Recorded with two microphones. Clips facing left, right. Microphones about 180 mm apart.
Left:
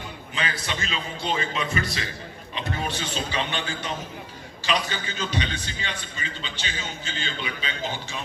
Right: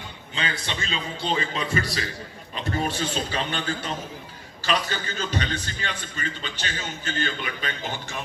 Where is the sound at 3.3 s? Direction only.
50° right (ahead or behind).